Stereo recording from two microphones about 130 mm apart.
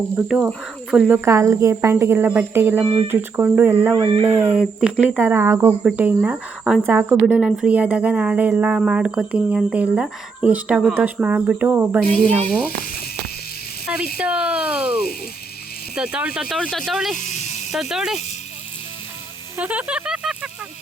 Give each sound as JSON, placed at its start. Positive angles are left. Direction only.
{"t": 0.3, "sound": "speech", "side_deg": -5}
{"t": 1.2, "sound": "speech", "side_deg": -20}
{"t": 2.8, "sound": "speech", "side_deg": -40}
{"t": 3.1, "sound": "speech", "side_deg": -15}
{"t": 12.3, "sound": "speech", "side_deg": 10}
{"t": 13.8, "sound": "speech", "side_deg": -10}
{"t": 16.6, "sound": "speech", "side_deg": 5}
{"t": 17.2, "sound": "speech", "side_deg": 70}
{"t": 17.7, "sound": "speech", "side_deg": -5}
{"t": 19.5, "sound": "speech", "side_deg": -10}